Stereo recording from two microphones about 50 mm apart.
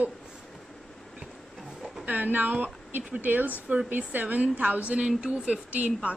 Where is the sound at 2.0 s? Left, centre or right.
Right.